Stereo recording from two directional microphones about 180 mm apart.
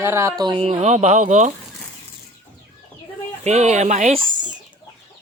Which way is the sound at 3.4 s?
40° right (ahead or behind).